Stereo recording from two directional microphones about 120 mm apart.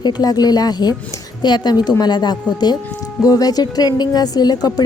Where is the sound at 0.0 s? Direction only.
35° left (ahead or behind).